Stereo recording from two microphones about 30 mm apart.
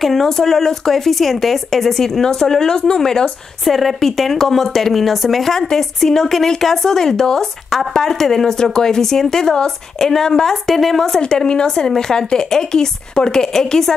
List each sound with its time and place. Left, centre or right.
0.0 s a woman's voice: centre
3.6 s speech: centre
5.5 s a woman's voice: centre
11.1 s a woman's voice: left